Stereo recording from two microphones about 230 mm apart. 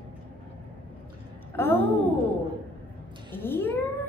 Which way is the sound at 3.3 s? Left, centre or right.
Centre.